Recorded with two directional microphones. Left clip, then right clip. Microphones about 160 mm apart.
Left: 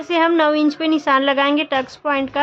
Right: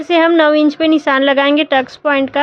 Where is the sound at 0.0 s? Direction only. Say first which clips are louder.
Right 5 dB; 25° right (ahead or behind).